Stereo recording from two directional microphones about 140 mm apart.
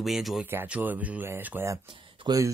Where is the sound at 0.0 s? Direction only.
Centre (ahead or behind).